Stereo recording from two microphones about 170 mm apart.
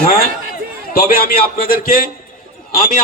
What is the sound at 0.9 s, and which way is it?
A man's voice, 60° left (ahead or behind).